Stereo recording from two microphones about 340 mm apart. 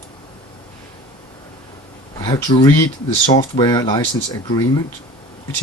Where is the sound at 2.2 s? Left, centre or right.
Centre.